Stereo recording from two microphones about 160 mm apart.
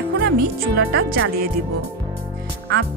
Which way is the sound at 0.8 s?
90° right.